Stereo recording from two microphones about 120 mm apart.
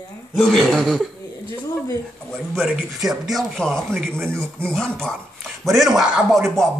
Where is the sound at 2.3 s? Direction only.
5° left (ahead or behind).